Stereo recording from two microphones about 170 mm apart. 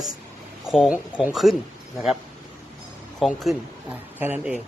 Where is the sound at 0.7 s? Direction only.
5° right (ahead or behind).